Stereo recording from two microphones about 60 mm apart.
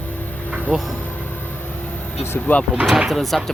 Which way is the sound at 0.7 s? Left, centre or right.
Centre.